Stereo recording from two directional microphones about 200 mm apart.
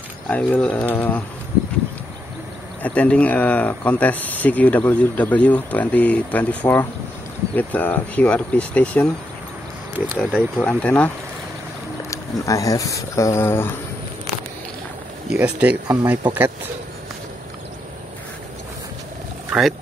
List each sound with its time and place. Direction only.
0.3 s speech: 5° left (ahead or behind)
2.8 s speech: 5° left (ahead or behind)
10.6 s speech: 5° left (ahead or behind)
12.1 s speech: 15° left (ahead or behind)
15.2 s speech: 5° right (ahead or behind)
19.5 s speech: 5° right (ahead or behind)